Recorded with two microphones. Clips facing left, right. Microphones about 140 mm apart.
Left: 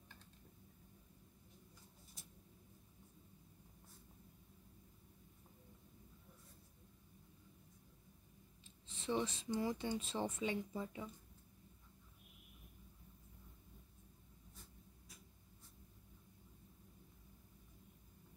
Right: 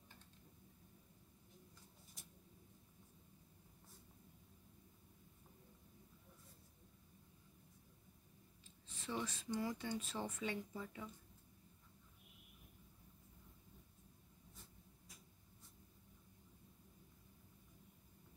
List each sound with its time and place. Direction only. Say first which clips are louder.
8.8 s speech: left 5 dB; 25° left (ahead or behind)